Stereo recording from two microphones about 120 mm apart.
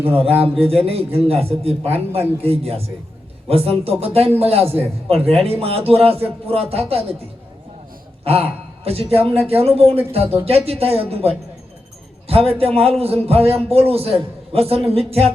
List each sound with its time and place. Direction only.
0.2 s a man's voice: 55° right (ahead or behind)
8.2 s a sound: 55° right (ahead or behind)
8.8 s a man's voice: 55° right (ahead or behind)